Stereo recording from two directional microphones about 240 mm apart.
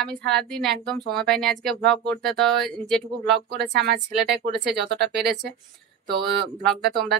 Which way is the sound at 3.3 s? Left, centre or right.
Right.